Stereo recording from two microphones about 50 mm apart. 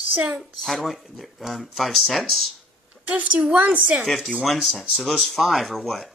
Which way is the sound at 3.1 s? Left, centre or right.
Right.